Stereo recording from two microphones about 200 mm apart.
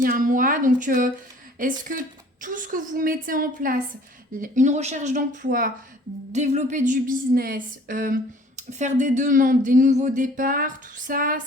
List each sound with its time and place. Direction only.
0.0 s a woman's voice: 40° right (ahead or behind)